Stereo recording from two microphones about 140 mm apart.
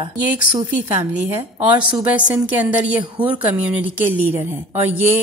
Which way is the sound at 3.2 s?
10° right (ahead or behind).